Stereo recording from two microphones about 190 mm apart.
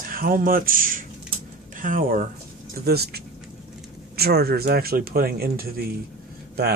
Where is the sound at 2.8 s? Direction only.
55° right (ahead or behind).